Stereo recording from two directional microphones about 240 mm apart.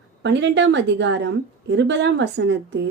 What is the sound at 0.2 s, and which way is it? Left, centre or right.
A woman's voice, right.